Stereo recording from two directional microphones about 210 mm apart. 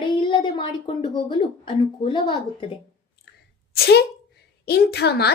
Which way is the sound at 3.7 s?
50° left (ahead or behind).